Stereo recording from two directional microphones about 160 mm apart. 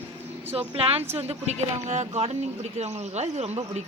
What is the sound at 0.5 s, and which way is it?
Speech, 35° right (ahead or behind).